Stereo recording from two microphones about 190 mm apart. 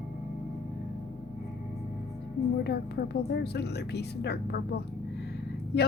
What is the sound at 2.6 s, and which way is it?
A woman's voice, 60° left (ahead or behind).